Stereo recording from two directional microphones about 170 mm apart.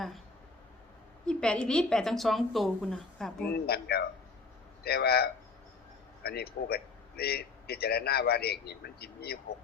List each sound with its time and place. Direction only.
1.3 s a woman's voice: 5° left (ahead or behind)
3.4 s a man's voice: 70° left (ahead or behind)